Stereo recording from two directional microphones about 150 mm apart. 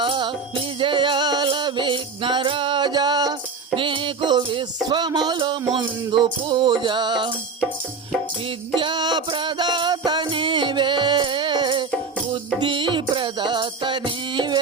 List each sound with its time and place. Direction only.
0.0 s music: 35° right (ahead or behind)
8.7 s music: 30° right (ahead or behind)